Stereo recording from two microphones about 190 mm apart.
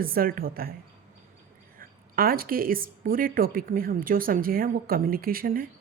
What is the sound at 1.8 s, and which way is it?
A woman's voice, 50° right (ahead or behind).